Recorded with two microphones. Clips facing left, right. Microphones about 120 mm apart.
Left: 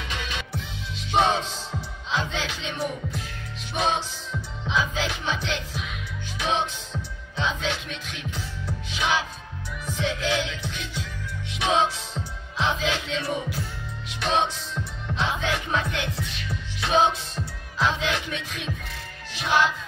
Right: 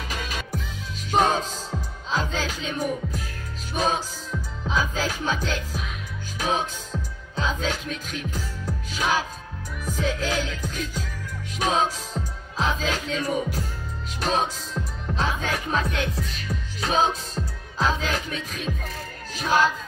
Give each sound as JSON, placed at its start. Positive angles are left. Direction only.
{"t": 0.1, "sound": "music", "side_deg": -40}
{"t": 19.3, "sound": "speech", "side_deg": -40}